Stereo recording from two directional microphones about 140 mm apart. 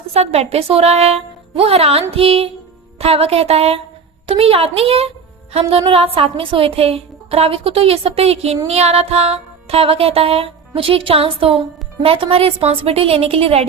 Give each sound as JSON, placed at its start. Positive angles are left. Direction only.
{"t": 0.1, "sound": "music", "side_deg": -45}